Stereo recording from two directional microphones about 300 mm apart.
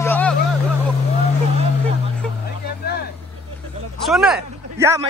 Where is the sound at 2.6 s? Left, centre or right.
Left.